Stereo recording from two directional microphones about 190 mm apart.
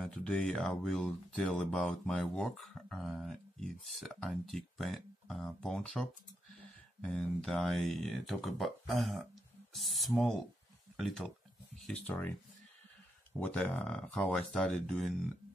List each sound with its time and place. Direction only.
0.0 s speech: 5° left (ahead or behind)
13.4 s speech: 10° left (ahead or behind)